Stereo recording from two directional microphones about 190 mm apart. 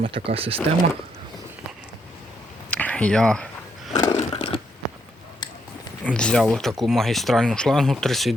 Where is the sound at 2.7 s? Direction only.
10° left (ahead or behind).